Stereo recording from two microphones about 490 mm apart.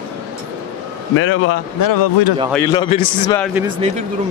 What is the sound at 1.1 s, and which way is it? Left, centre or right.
Speech, left.